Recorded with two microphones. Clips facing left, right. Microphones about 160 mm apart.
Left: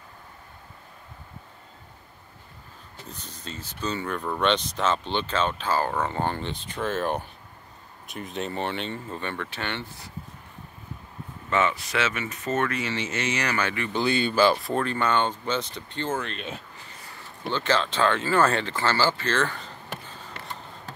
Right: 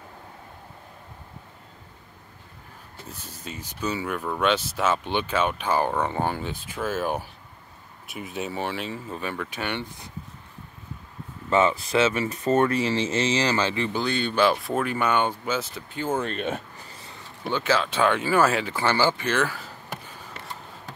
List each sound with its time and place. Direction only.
3.1 s speech: 10° right (ahead or behind)
11.5 s speech: 30° right (ahead or behind)
13.9 s speech: 5° left (ahead or behind)
16.2 s speech: 45° right (ahead or behind)
17.4 s speech: 10° right (ahead or behind)